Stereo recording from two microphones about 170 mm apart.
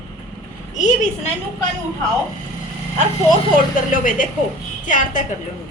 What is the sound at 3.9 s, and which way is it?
A woman's voice, 50° left (ahead or behind).